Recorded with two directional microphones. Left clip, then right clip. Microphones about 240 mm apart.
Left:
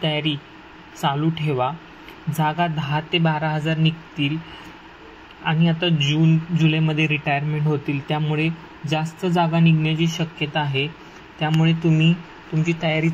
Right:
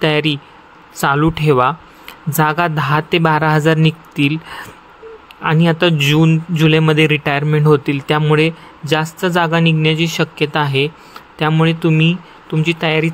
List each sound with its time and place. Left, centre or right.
0.0 s speech: right
5.4 s speech: right